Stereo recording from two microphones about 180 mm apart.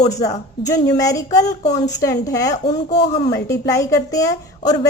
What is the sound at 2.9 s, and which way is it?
Speech, 40° left (ahead or behind).